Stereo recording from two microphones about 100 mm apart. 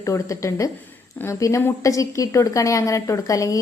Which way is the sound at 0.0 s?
30° left (ahead or behind).